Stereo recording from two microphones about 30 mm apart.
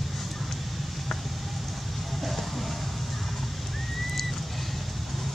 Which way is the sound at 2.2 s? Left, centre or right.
Centre.